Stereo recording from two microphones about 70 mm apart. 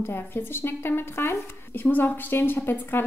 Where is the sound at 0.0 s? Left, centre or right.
Left.